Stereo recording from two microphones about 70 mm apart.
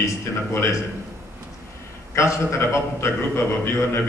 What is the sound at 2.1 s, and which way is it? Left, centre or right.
A man's voice, left.